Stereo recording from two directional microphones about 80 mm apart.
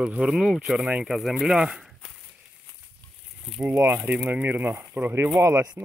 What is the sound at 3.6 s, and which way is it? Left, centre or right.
Speech, right.